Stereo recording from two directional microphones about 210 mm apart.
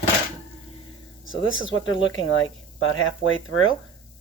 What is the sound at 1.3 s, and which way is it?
Speech, 65° left (ahead or behind).